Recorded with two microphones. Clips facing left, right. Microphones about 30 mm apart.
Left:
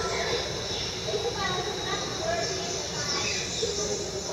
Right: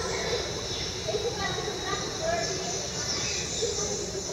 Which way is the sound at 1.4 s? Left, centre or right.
Centre.